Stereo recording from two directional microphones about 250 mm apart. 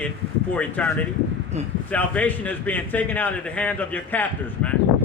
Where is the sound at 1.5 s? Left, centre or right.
Right.